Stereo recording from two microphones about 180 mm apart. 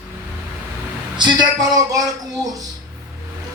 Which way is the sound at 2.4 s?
20° right (ahead or behind).